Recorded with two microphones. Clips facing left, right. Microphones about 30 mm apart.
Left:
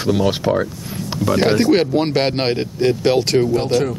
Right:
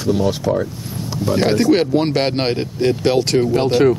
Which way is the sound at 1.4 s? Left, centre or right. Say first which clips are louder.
Even; centre.